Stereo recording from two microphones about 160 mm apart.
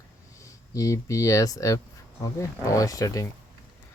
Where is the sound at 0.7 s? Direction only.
20° left (ahead or behind).